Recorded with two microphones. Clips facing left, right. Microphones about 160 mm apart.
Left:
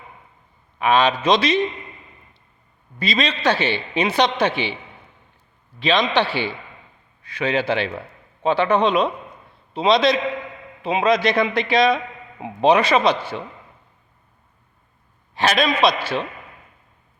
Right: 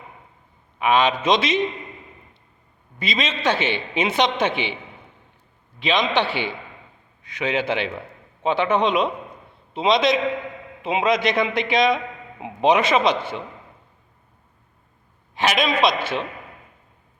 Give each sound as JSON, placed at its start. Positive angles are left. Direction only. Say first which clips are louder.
{"t": 0.8, "sound": "a man's voice", "louder": "left 1 dB", "side_deg": -20}
{"t": 3.0, "sound": "a man's voice", "louder": "left 3 dB", "side_deg": -20}
{"t": 5.8, "sound": "a man's voice", "louder": "left 2 dB", "side_deg": -20}
{"t": 15.4, "sound": "a man's voice", "louder": "left 2 dB", "side_deg": -20}